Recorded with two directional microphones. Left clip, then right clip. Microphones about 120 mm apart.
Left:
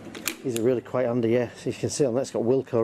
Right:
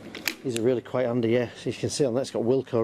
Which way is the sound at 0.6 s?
20° right (ahead or behind).